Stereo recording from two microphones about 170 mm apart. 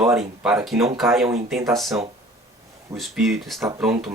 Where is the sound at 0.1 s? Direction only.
Centre (ahead or behind).